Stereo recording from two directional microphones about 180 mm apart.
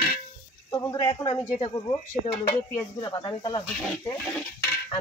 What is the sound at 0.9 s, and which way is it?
Speech, 30° left (ahead or behind).